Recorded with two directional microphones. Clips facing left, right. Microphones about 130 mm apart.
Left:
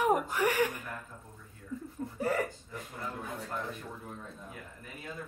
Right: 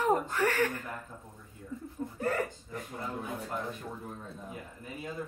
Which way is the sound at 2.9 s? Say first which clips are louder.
Right 2 dB; 20° right (ahead or behind).